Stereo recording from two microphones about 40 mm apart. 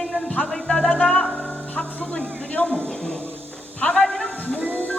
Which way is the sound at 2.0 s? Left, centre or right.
Left.